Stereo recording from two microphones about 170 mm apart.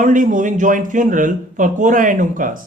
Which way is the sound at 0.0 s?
50° right (ahead or behind).